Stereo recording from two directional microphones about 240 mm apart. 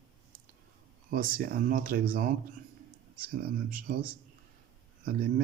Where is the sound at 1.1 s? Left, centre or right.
Right.